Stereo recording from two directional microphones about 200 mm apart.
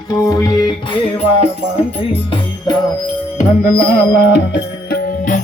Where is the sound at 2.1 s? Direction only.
25° left (ahead or behind).